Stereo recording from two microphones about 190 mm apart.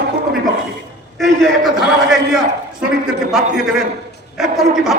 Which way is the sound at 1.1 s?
Centre (ahead or behind).